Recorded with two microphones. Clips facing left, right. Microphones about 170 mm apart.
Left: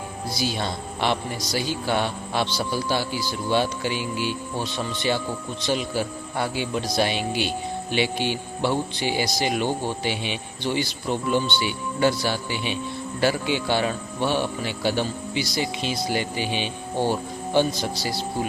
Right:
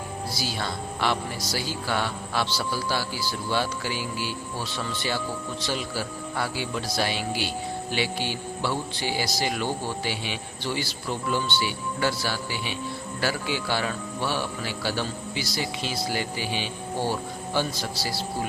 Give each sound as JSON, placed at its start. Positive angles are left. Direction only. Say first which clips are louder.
{"t": 0.3, "sound": "a man's voice", "louder": "left 6 dB", "side_deg": 20}